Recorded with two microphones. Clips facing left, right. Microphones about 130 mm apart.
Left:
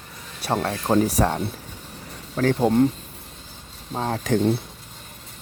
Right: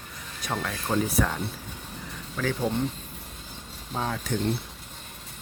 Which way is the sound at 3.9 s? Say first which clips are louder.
Left 4 dB; 40° left (ahead or behind).